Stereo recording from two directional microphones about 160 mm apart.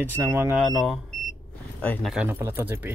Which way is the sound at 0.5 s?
Centre (ahead or behind).